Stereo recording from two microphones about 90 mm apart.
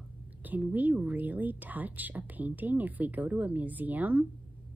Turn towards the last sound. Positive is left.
turn(degrees=-20)  # may be behind; listen again after turning